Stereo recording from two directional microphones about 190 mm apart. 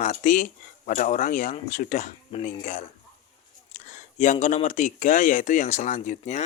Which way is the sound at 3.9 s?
40° left (ahead or behind).